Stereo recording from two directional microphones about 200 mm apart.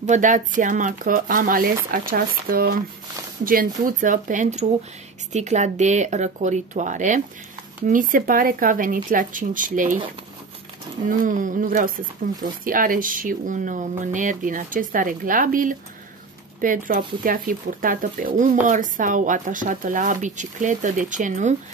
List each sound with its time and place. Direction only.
0.0 s speech: 40° right (ahead or behind)
11.1 s speech: 40° right (ahead or behind)